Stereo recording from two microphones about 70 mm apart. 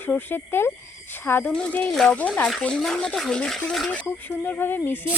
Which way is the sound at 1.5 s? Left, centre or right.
Centre.